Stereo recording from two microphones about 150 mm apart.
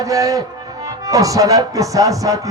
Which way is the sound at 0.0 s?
25° right (ahead or behind).